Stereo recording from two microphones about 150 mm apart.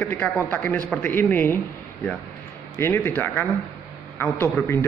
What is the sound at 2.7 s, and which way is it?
Speech, 15° left (ahead or behind).